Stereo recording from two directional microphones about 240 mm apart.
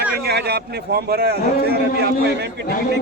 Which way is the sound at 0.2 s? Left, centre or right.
Right.